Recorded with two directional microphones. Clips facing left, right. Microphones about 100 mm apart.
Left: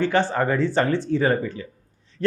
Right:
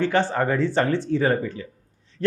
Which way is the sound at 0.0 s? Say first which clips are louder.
Even; 15° left (ahead or behind).